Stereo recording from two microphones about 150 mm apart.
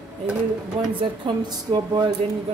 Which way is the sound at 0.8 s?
35° right (ahead or behind).